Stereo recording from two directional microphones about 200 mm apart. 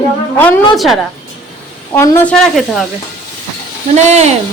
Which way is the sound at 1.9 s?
15° left (ahead or behind).